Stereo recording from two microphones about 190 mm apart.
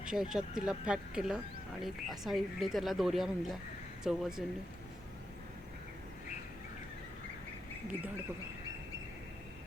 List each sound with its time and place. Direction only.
0.0 s speech: 5° right (ahead or behind)